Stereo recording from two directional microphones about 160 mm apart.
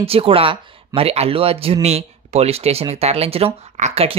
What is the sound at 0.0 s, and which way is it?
Speech, 35° right (ahead or behind).